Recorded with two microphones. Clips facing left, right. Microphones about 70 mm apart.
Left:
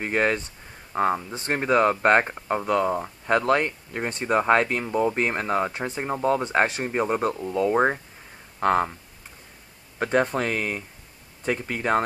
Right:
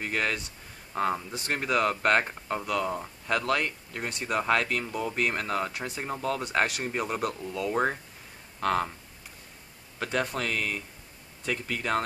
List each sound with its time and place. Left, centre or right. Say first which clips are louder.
0.0 s speech: left 6 dB; left
9.9 s speech: left 7 dB; left